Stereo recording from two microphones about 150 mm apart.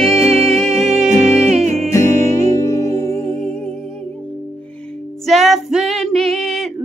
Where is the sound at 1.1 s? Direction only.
20° left (ahead or behind).